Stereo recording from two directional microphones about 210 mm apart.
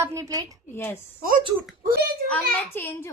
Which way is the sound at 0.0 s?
15° right (ahead or behind).